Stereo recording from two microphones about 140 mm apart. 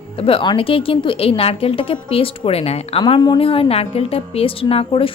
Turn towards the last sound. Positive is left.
turn(degrees=40)  # may be behind; listen again after turning